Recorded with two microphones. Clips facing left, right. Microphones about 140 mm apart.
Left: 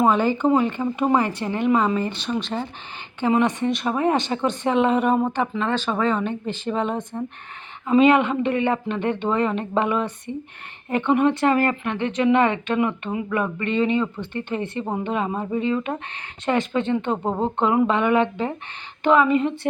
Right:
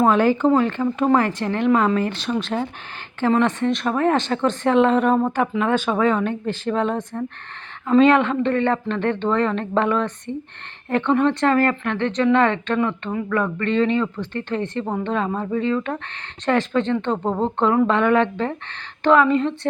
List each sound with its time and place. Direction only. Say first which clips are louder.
0.0 s speech: right 2 dB; centre (ahead or behind)
5.3 s speech: right 3 dB; 5° right (ahead or behind)